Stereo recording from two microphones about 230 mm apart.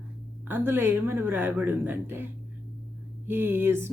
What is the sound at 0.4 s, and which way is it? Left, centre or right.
Speech, centre.